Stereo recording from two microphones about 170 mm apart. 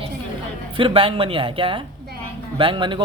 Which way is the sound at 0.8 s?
30° right (ahead or behind).